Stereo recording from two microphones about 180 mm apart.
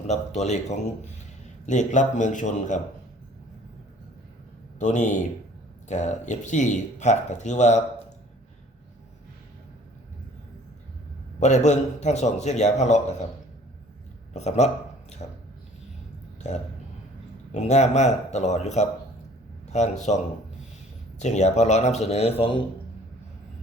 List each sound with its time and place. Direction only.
0.1 s a man's voice: 40° left (ahead or behind)
4.8 s speech: 40° left (ahead or behind)
11.3 s speech: 40° left (ahead or behind)
14.3 s speech: 40° left (ahead or behind)
16.4 s speech: 40° left (ahead or behind)
21.2 s speech: 40° left (ahead or behind)